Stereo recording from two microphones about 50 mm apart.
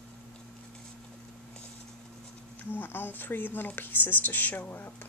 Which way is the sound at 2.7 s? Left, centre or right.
Left.